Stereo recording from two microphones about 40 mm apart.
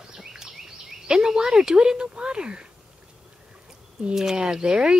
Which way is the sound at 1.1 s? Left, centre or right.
Centre.